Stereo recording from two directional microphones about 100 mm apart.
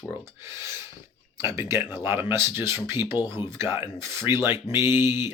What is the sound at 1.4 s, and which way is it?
Speech, 25° right (ahead or behind).